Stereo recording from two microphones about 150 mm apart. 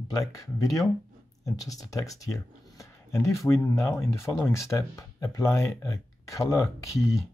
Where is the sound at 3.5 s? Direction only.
20° left (ahead or behind).